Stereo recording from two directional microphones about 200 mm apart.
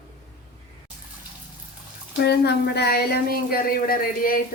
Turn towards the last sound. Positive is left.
turn(degrees=45)  # may be behind; listen again after turning